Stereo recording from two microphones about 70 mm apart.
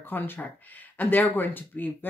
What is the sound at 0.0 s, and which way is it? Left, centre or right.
Speech, left.